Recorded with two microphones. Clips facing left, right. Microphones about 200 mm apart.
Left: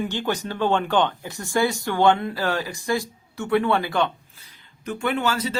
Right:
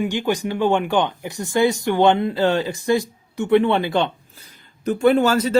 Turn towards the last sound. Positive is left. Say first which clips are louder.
# right 8 dB
turn(degrees=-45)  # may be behind; listen again after turning